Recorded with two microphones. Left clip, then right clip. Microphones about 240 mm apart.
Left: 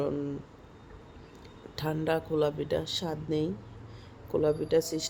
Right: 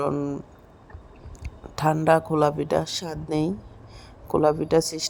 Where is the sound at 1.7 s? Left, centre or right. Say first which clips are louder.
Right 11 dB; right.